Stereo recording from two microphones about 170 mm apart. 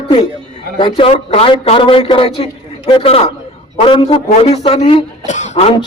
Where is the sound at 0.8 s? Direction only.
30° left (ahead or behind).